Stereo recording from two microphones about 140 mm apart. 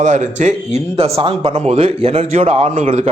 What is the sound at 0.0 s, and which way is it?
Speech, 60° right (ahead or behind).